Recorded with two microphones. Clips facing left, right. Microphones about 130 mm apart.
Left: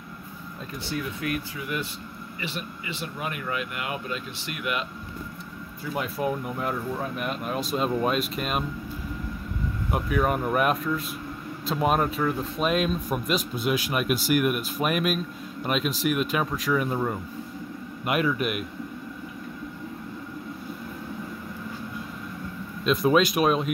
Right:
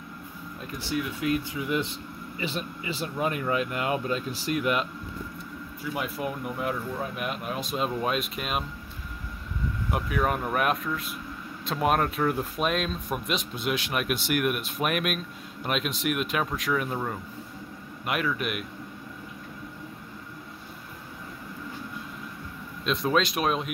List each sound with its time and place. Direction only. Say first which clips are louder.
0.9 s speech: right 3 dB; 20° right (ahead or behind)
5.9 s speech: left 4 dB; centre (ahead or behind)
9.8 s speech: left 2 dB; centre (ahead or behind)
22.8 s speech: left 4 dB; 10° left (ahead or behind)